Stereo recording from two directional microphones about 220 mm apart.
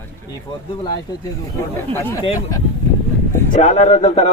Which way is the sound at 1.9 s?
10° left (ahead or behind).